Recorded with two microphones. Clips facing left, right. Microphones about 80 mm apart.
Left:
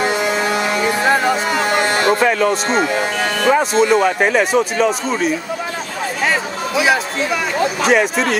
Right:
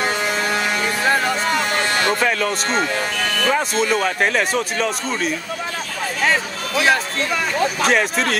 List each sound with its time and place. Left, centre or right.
0.0 s music: centre
2.2 s speech: centre
3.2 s music: left
3.4 s speech: centre